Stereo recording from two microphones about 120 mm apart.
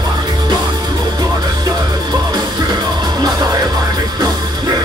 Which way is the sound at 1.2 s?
35° right (ahead or behind).